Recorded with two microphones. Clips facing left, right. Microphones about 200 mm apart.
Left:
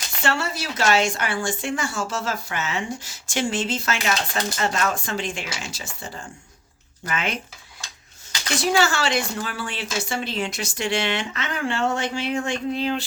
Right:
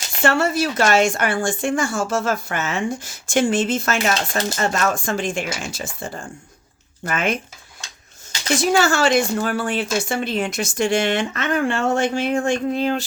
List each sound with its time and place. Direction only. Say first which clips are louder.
0.2 s speech: right 7 dB; 50° right (ahead or behind)
8.7 s speech: right 5 dB; 50° right (ahead or behind)